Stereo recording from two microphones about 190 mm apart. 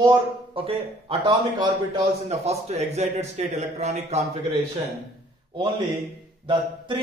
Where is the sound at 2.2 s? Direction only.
35° right (ahead or behind).